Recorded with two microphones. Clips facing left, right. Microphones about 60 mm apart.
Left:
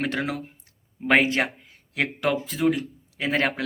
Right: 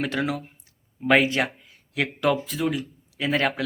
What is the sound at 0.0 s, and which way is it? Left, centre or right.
Speech, left.